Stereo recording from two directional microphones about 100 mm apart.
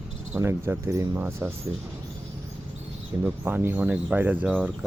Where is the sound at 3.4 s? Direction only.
25° right (ahead or behind).